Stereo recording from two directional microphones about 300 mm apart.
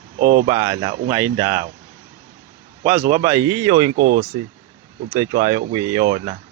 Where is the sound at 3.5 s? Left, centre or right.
Centre.